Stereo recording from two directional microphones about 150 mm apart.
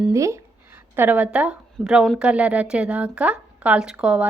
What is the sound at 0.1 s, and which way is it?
A woman's voice, 20° right (ahead or behind).